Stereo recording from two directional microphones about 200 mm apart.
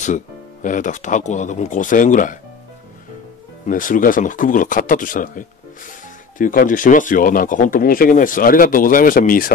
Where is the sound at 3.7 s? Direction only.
40° left (ahead or behind).